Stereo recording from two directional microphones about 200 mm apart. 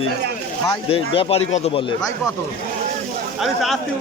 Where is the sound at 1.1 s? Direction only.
30° left (ahead or behind).